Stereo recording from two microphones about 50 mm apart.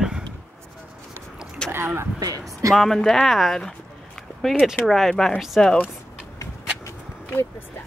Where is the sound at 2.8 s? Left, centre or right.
Centre.